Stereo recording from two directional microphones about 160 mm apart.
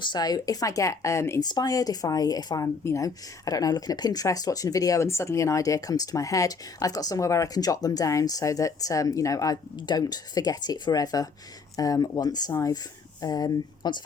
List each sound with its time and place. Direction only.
0.0 s speech: 25° left (ahead or behind)